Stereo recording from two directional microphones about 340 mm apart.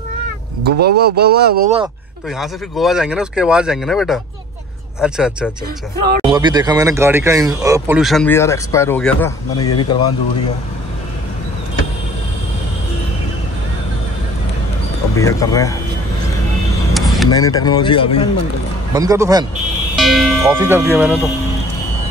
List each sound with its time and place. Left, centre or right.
0.7 s speech: right
2.2 s speech: centre
6.2 s speech: centre
15.1 s speech: centre
17.3 s speech: centre
18.9 s speech: centre